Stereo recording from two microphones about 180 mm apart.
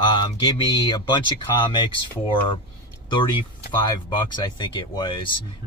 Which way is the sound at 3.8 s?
25° left (ahead or behind).